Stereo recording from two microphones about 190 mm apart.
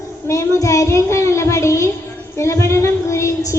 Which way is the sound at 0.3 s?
15° left (ahead or behind).